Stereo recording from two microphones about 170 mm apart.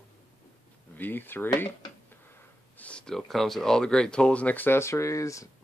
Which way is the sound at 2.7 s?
5° left (ahead or behind).